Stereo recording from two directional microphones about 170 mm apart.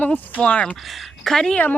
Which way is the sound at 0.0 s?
10° left (ahead or behind).